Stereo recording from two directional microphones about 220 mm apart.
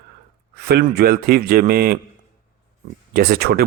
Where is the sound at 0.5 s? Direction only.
45° right (ahead or behind).